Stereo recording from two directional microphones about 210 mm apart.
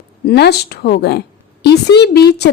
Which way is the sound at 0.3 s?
50° left (ahead or behind).